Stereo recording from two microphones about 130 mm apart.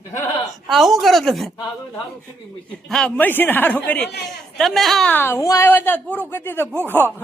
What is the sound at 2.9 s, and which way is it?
A man's voice, 10° left (ahead or behind).